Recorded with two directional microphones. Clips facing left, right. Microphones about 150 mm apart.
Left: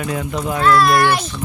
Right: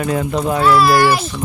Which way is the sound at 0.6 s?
5° right (ahead or behind).